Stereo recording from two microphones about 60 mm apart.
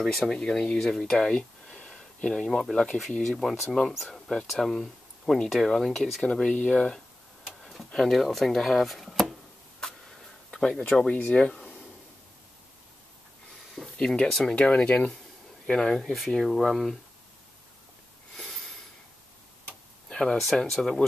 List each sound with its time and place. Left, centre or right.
0.0 s speech: centre
1.2 s a sound: centre
3.3 s speech: centre
6.5 s speech: left
7.4 s tick-tock: centre
7.9 s speech: centre
9.8 s a sound: centre
10.5 s speech: centre
11.1 s speech: left
13.9 s speech: centre
16.0 s speech: centre
18.3 s a sound: centre
20.1 s a sound: centre
20.3 s speech: centre